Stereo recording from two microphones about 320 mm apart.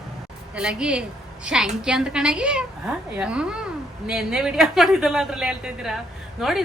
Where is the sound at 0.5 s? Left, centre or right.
Centre.